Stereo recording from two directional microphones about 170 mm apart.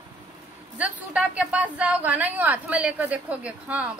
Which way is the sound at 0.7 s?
10° right (ahead or behind).